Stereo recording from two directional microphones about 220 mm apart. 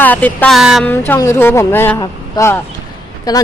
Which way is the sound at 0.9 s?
10° left (ahead or behind).